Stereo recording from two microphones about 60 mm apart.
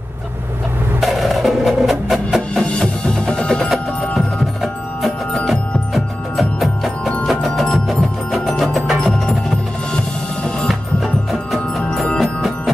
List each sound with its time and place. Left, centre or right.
1.0 s music: centre
2.8 s percussion: centre
5.0 s music: centre
12.2 s music: centre